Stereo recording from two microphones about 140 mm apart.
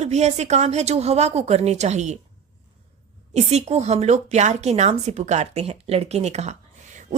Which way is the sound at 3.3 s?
50° right (ahead or behind).